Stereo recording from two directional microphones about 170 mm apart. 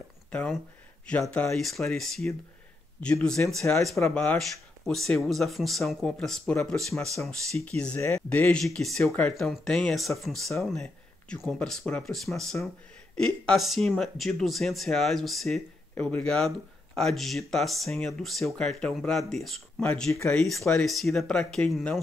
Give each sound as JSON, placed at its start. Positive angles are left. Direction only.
{"t": 0.3, "sound": "speech", "side_deg": 5}
{"t": 15.9, "sound": "speech", "side_deg": 10}
{"t": 20.6, "sound": "speech", "side_deg": 0}